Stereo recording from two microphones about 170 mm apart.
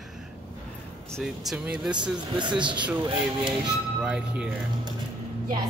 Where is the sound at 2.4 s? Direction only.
30° right (ahead or behind).